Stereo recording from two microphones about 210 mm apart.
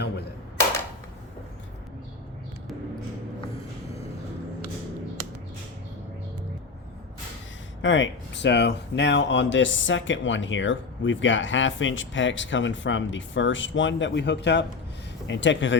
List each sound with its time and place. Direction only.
7.8 s speech: 60° left (ahead or behind)